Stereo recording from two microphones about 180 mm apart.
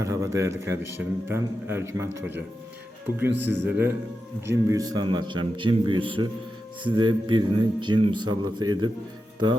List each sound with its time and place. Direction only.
0.0 s a man's voice: 15° right (ahead or behind)